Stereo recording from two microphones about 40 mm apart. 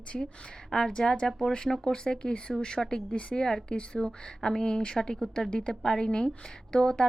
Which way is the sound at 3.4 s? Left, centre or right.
Centre.